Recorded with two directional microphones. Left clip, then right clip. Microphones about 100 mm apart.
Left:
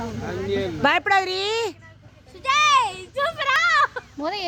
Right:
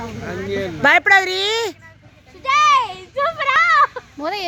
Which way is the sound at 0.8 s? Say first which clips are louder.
Right 7 dB; 5° right (ahead or behind).